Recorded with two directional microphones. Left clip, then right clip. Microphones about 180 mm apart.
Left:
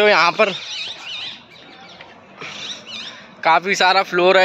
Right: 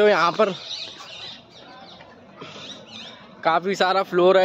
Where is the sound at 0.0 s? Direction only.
20° right (ahead or behind).